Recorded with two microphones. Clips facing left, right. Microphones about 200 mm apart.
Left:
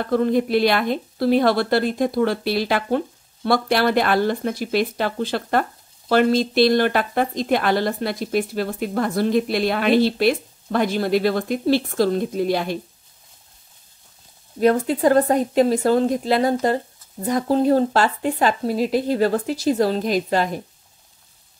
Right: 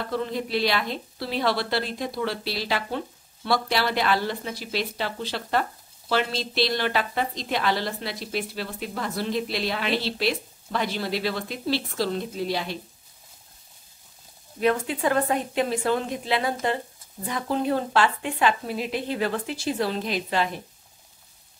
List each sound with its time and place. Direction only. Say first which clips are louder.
0.0 s speech: left 9 dB; 50° left (ahead or behind)
14.6 s speech: left 7 dB; 40° left (ahead or behind)